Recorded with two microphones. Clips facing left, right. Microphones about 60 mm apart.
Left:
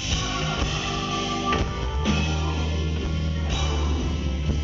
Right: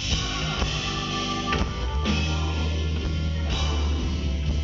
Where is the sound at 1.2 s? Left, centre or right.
Centre.